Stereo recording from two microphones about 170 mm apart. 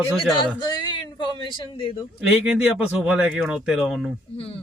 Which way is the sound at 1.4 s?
30° left (ahead or behind).